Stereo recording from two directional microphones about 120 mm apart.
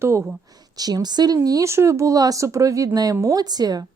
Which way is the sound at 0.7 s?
35° right (ahead or behind).